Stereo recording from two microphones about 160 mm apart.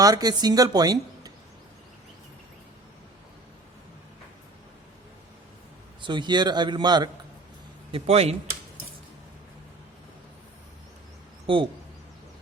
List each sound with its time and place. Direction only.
0.0 s speech: 25° right (ahead or behind)
6.0 s speech: 30° right (ahead or behind)
7.9 s speech: 40° right (ahead or behind)
11.4 s speech: 35° right (ahead or behind)